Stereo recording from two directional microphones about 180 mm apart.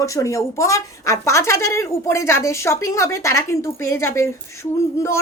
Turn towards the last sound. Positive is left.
turn(degrees=15)  # may be behind; listen again after turning